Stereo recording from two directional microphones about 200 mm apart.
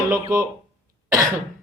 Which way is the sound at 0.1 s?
15° right (ahead or behind).